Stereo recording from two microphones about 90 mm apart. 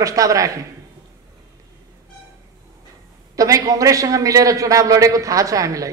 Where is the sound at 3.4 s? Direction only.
40° right (ahead or behind).